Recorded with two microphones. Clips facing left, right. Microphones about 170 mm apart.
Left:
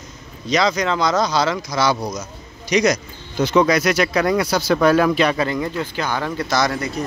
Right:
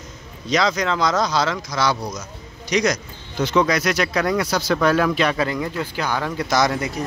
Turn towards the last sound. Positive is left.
turn(degrees=-15)  # may be behind; listen again after turning